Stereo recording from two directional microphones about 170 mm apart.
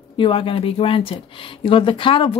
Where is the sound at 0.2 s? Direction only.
30° left (ahead or behind).